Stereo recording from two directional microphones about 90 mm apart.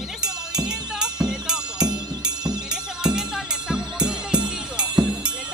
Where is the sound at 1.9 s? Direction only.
50° right (ahead or behind).